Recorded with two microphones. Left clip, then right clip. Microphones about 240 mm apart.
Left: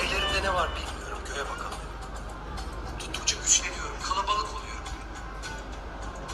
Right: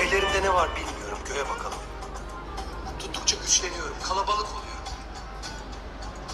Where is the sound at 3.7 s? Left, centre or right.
Right.